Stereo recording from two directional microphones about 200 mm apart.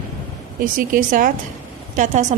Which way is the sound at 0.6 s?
45° right (ahead or behind).